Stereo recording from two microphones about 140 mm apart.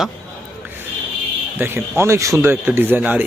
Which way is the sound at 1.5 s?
15° right (ahead or behind).